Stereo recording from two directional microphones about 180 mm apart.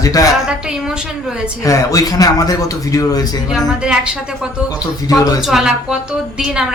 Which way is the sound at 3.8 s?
5° right (ahead or behind).